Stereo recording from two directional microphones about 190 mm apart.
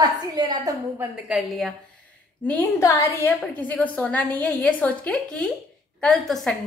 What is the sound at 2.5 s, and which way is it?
A woman's voice, 10° left (ahead or behind).